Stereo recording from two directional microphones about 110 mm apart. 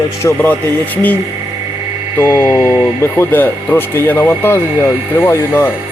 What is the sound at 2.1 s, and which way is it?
Speech, 20° left (ahead or behind).